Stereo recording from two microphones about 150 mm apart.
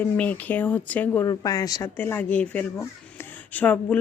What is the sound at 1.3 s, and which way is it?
Speech, 25° left (ahead or behind).